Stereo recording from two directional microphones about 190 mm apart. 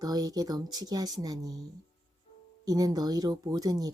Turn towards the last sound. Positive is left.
turn(degrees=-20)  # may be behind; listen again after turning